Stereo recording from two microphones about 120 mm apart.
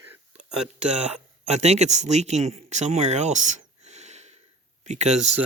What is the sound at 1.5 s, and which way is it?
Speech, 65° right (ahead or behind).